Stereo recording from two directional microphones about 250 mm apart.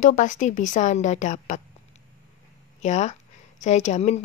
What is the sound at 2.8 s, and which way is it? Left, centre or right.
Speech, left.